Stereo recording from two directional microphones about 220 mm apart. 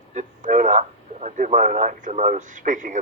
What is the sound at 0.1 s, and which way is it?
A man's voice, 35° right (ahead or behind).